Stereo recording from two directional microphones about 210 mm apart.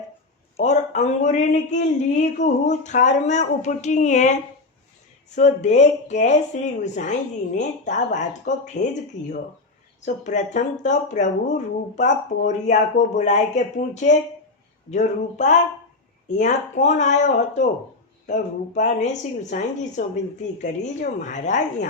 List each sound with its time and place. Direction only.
0.5 s speech: 35° left (ahead or behind)
10.1 s speech: 35° left (ahead or behind)